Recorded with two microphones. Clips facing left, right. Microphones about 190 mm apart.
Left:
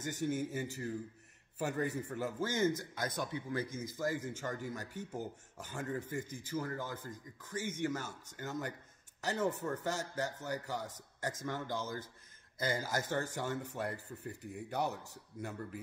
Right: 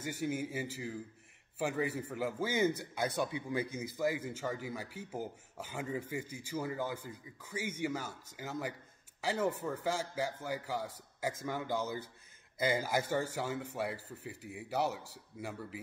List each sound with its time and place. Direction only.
0.0 s a man's voice: 10° right (ahead or behind)